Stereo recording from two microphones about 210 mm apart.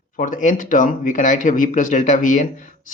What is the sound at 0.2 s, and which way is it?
Speech, 40° left (ahead or behind).